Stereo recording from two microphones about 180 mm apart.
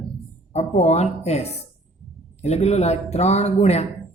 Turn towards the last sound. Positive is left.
turn(degrees=35)  # may be behind; listen again after turning